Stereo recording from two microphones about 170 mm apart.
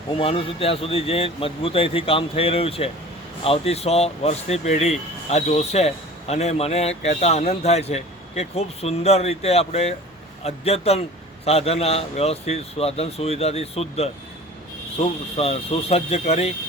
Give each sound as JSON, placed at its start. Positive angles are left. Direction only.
{"t": 0.2, "sound": "speech", "side_deg": 35}